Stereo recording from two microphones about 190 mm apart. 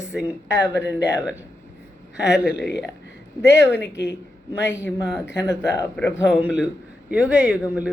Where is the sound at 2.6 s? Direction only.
65° left (ahead or behind).